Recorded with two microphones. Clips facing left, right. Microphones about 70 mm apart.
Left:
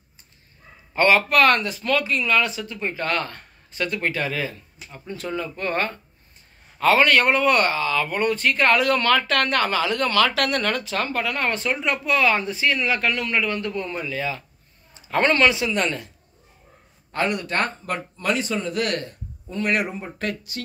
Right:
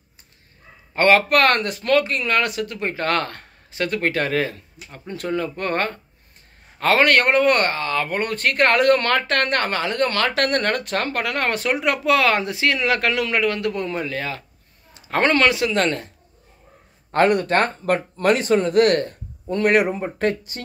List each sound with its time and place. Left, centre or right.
0.9 s speech: right
17.1 s speech: right
19.4 s a man's voice: right
19.7 s speech: right